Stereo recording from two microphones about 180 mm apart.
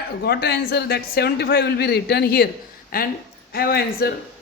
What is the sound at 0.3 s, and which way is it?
A man's voice, 65° left (ahead or behind).